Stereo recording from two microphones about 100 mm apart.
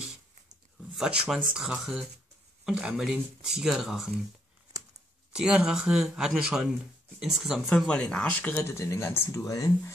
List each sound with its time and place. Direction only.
0.9 s speech: 5° right (ahead or behind)
5.3 s speech: 5° right (ahead or behind)
7.7 s speech: 10° left (ahead or behind)
8.5 s speech: 30° left (ahead or behind)